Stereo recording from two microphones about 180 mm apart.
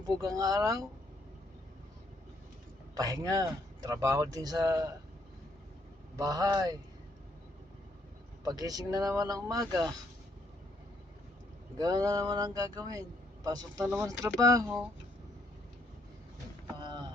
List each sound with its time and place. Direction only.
0.2 s speech: 20° right (ahead or behind)
2.9 s speech: 20° right (ahead or behind)
6.1 s speech: 20° right (ahead or behind)
8.4 s speech: 20° right (ahead or behind)
11.8 s speech: 20° right (ahead or behind)